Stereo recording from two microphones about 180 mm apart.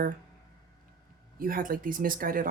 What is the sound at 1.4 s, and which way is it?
Speech, 50° right (ahead or behind).